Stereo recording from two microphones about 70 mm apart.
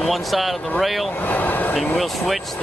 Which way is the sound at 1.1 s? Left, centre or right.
Left.